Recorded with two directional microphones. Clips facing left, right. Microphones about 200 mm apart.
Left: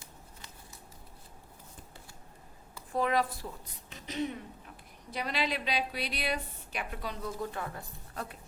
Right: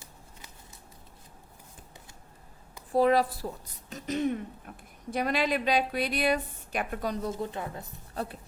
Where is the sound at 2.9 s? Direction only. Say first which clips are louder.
Right 6 dB; 35° right (ahead or behind).